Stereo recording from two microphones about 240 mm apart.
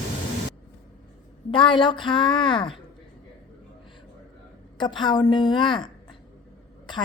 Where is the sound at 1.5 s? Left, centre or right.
Left.